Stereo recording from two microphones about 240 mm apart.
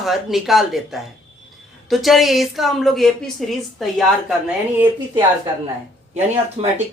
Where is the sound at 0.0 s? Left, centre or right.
Centre.